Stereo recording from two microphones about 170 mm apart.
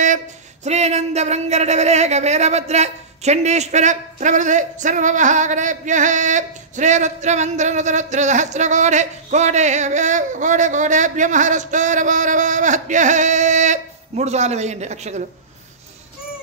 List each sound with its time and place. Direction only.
0.7 s speech: 40° right (ahead or behind)